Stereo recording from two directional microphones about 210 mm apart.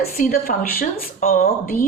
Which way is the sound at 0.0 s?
45° left (ahead or behind).